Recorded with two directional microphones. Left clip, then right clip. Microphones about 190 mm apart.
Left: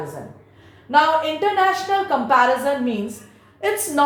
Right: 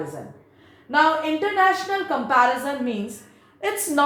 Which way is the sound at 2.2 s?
20° right (ahead or behind).